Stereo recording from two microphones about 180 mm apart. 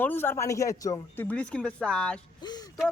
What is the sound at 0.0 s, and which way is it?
Speech, 10° left (ahead or behind).